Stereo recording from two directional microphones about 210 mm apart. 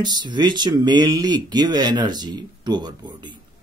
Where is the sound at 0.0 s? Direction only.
20° right (ahead or behind).